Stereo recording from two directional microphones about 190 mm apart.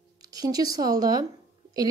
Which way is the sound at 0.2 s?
20° right (ahead or behind).